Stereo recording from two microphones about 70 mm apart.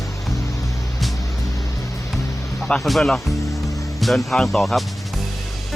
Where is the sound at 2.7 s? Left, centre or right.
Centre.